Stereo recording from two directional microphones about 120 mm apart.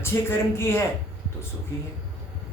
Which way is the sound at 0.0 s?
20° left (ahead or behind).